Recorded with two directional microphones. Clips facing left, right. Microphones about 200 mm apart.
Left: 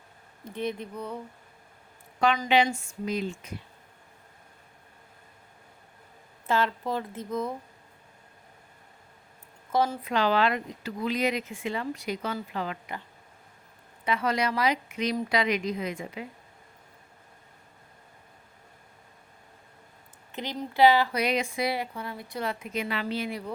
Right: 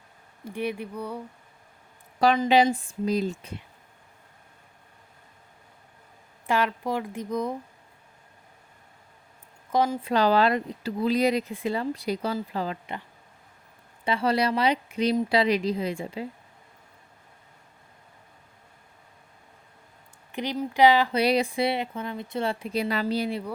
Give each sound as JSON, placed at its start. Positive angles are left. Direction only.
{"t": 0.4, "sound": "speech", "side_deg": -10}
{"t": 2.1, "sound": "a woman's voice", "side_deg": -35}
{"t": 6.5, "sound": "speech", "side_deg": -15}
{"t": 9.7, "sound": "speech", "side_deg": -15}
{"t": 10.0, "sound": "speech", "side_deg": -35}
{"t": 14.0, "sound": "speech", "side_deg": -30}
{"t": 20.3, "sound": "speech", "side_deg": -15}
{"t": 21.2, "sound": "speech", "side_deg": -35}